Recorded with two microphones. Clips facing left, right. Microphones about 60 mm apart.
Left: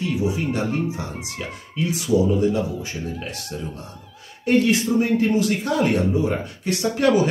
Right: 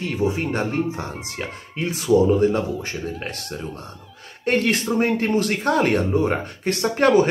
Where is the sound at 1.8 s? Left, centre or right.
Right.